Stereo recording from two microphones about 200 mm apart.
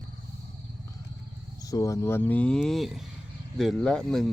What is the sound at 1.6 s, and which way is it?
Speech, 15° left (ahead or behind).